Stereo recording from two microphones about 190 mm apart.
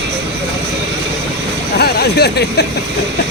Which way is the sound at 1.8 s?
55° left (ahead or behind).